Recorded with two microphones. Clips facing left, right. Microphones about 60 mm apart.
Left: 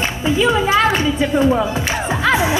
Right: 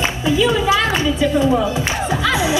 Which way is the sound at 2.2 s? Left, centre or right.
Left.